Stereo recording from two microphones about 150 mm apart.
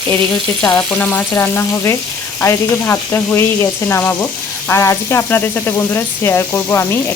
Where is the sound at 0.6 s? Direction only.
5° left (ahead or behind).